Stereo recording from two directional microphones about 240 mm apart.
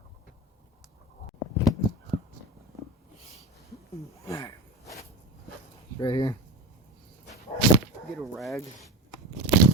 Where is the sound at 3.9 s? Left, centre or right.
Centre.